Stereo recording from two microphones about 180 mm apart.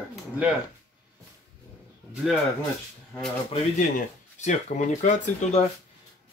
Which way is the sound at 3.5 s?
40° left (ahead or behind).